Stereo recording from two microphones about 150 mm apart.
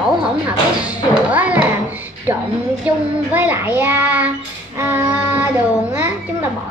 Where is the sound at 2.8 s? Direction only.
10° right (ahead or behind).